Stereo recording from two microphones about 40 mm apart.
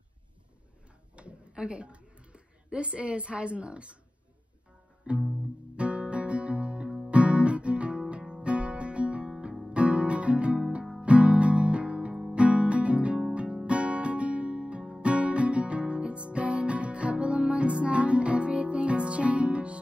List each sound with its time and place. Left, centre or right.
1.1 s a sound: right
5.1 s music: right
5.8 s guitar: right
7.1 s music: right
12.1 s music: centre
12.4 s music: right